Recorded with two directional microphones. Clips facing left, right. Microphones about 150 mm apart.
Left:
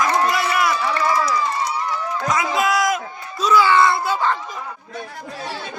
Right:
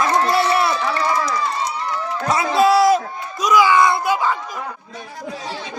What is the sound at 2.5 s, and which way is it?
Speech, 30° right (ahead or behind).